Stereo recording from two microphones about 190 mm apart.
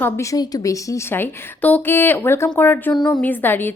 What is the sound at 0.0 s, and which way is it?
A woman's voice, 15° left (ahead or behind).